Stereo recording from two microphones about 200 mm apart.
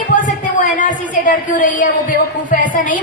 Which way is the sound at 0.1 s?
40° left (ahead or behind).